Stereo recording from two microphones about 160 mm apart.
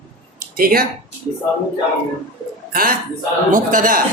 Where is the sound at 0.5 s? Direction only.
65° right (ahead or behind).